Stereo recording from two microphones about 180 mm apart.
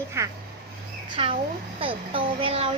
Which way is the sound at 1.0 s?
30° right (ahead or behind).